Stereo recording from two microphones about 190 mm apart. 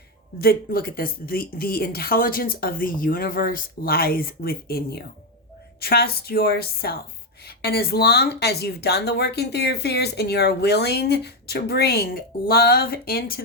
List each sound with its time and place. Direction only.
0.3 s a woman's voice: 50° left (ahead or behind)